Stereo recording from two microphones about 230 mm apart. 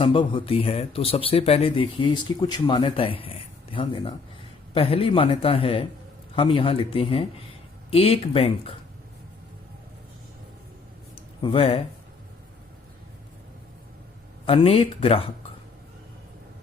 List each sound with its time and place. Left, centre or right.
0.0 s speech: left
11.4 s speech: left
14.4 s speech: left